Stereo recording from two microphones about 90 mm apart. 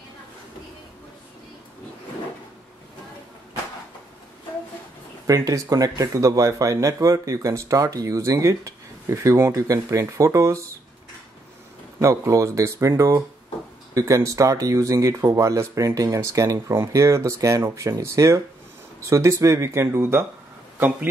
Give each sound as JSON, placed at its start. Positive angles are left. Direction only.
{"t": 5.2, "sound": "speech", "side_deg": -40}
{"t": 12.0, "sound": "speech", "side_deg": -35}